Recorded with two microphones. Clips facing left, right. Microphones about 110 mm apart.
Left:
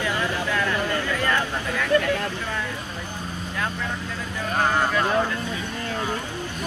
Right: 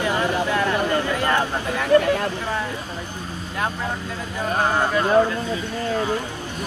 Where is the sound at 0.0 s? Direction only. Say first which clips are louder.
Right 4 dB; 20° right (ahead or behind).